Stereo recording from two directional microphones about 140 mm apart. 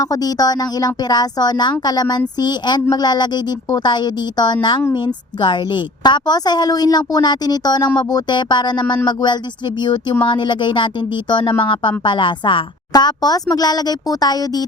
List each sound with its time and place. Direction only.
0.0 s a woman's voice: 25° left (ahead or behind)